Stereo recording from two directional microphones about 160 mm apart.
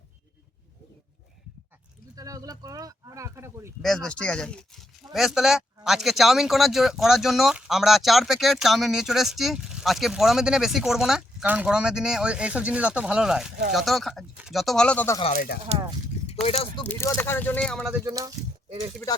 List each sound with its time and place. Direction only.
2.1 s speech: 20° right (ahead or behind)
3.8 s speech: 5° left (ahead or behind)
15.7 s a sound: 45° right (ahead or behind)
16.2 s speech: 40° left (ahead or behind)
16.8 s speech: 15° left (ahead or behind)
18.0 s speech: 20° right (ahead or behind)